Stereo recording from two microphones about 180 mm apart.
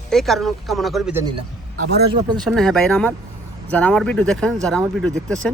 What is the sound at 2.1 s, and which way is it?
Speech, 25° right (ahead or behind).